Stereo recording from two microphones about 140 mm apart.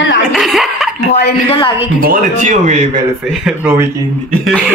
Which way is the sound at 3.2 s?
Centre (ahead or behind).